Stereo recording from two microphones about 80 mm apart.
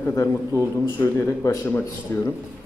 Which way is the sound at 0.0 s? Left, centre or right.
Left.